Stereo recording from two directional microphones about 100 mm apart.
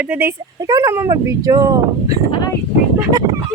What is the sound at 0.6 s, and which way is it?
Speech, 35° right (ahead or behind).